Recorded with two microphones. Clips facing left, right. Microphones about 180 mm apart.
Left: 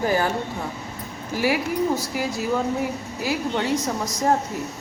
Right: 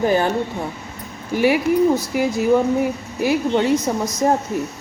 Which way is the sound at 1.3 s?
20° right (ahead or behind).